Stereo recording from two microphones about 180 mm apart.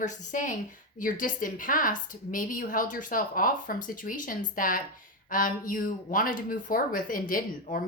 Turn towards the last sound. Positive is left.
turn(degrees=50)  # may be behind; listen again after turning